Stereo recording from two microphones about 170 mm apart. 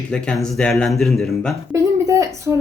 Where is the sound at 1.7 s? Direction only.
20° right (ahead or behind).